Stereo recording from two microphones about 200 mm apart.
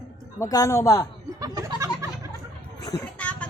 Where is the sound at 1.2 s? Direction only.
15° right (ahead or behind).